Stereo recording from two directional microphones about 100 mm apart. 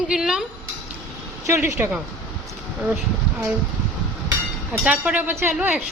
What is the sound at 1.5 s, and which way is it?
Speech, 25° right (ahead or behind).